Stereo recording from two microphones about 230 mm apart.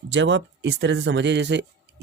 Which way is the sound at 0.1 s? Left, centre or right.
Right.